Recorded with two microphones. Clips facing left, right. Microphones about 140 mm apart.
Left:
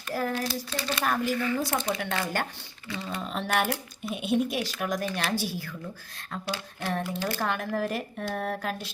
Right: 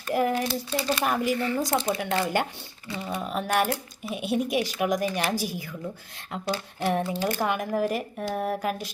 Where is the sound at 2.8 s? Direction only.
20° right (ahead or behind).